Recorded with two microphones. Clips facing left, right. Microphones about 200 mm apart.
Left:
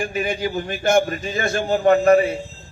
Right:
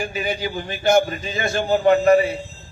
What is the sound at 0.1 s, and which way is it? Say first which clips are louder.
A man's voice: left 2 dB; 50° left (ahead or behind).